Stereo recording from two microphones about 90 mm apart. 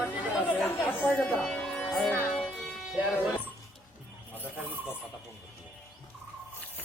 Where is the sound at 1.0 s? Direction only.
15° left (ahead or behind).